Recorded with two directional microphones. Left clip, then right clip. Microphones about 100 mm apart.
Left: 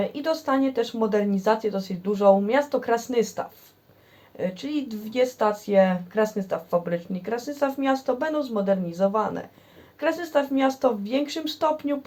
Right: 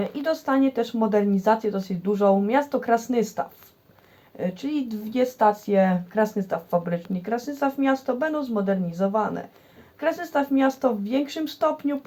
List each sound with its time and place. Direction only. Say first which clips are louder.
0.1 s speech: even; 25° left (ahead or behind)